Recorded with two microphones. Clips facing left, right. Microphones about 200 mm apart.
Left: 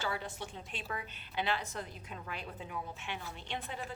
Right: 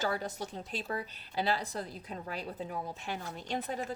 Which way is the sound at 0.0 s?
40° right (ahead or behind).